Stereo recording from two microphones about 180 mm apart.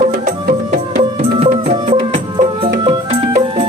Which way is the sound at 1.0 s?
35° right (ahead or behind).